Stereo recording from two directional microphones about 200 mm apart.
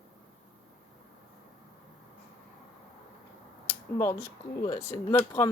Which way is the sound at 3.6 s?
10° left (ahead or behind).